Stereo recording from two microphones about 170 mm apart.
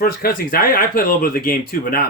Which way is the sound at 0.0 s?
60° left (ahead or behind).